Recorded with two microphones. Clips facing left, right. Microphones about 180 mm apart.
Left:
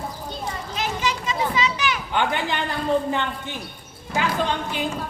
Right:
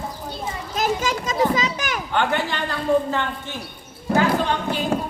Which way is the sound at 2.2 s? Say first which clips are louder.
Right 2 dB; 15° left (ahead or behind).